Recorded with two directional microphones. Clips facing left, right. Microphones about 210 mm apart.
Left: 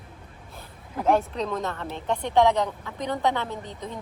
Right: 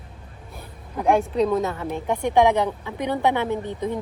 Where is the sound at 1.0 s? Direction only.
10° right (ahead or behind).